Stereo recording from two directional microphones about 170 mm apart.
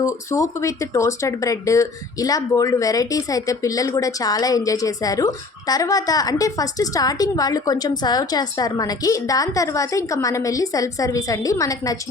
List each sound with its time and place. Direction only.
0.0 s speech: 20° left (ahead or behind)